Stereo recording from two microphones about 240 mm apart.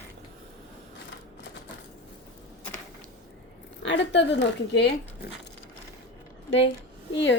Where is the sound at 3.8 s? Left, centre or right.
Left.